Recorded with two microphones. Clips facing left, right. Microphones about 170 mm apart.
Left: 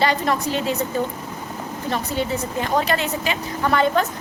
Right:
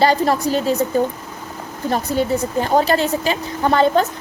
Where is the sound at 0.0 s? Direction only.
35° right (ahead or behind).